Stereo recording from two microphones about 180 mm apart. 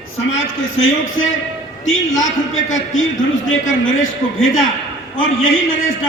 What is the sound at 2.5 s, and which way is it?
A man's voice, 90° left.